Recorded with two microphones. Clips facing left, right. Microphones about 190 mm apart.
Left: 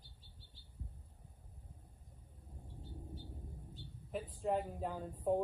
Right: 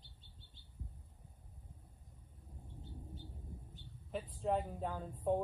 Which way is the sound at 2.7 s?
20° right (ahead or behind).